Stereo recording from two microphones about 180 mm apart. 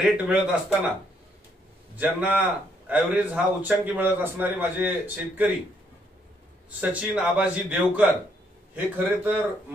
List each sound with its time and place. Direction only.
0.0 s a man's voice: 5° right (ahead or behind)
2.0 s a man's voice: 10° right (ahead or behind)
6.8 s a man's voice: 10° right (ahead or behind)